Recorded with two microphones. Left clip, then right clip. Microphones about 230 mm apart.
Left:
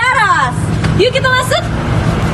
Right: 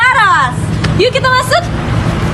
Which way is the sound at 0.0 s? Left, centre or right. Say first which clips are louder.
Right 2 dB; centre.